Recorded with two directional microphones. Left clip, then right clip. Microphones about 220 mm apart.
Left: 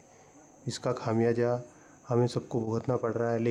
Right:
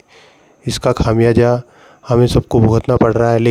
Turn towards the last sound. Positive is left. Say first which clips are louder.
# right 17 dB
turn(degrees=-45)  # may be behind; listen again after turning